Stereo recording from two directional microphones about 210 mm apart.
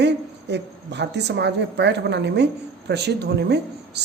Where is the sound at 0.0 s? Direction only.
55° right (ahead or behind).